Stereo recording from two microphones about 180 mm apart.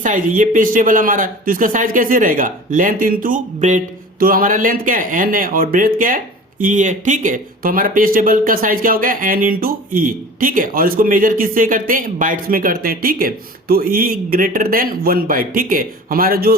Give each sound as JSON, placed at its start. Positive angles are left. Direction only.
{"t": 0.0, "sound": "speech", "side_deg": -45}